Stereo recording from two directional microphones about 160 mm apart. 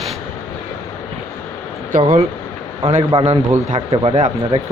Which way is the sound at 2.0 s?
40° right (ahead or behind).